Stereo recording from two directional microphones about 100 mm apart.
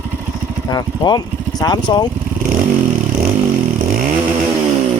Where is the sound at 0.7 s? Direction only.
45° left (ahead or behind).